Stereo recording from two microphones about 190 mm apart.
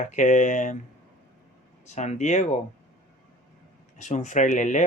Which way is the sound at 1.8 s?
35° left (ahead or behind).